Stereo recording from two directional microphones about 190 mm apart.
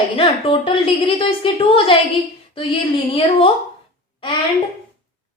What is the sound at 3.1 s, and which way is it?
Speech, 30° left (ahead or behind).